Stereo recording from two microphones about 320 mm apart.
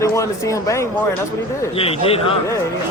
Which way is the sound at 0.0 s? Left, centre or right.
Centre.